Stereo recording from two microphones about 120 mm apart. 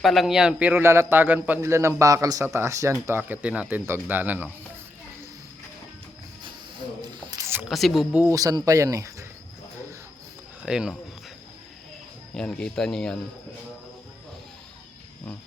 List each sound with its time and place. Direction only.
0.0 s a man's voice: centre (ahead or behind)
7.3 s a sound: 30° right (ahead or behind)
7.7 s speech: centre (ahead or behind)
8.1 s speech: 15° right (ahead or behind)
8.4 s a man's voice: 30° right (ahead or behind)
10.6 s speech: 5° right (ahead or behind)
12.3 s speech: 5° left (ahead or behind)